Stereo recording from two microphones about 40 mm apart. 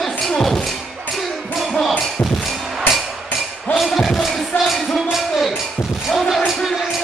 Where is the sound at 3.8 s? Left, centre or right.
Centre.